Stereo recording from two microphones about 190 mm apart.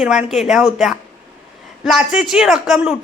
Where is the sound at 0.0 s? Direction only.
5° right (ahead or behind).